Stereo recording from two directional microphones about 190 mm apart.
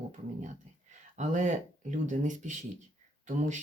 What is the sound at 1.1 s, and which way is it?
Speech, 40° right (ahead or behind).